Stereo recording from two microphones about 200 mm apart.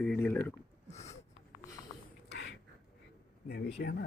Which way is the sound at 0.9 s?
35° left (ahead or behind).